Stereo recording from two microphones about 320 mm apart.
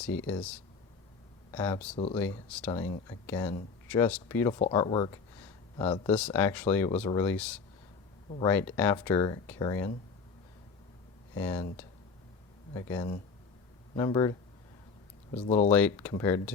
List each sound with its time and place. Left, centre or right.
1.5 s speech: centre
11.3 s speech: centre
15.4 s speech: left
15.7 s speech: centre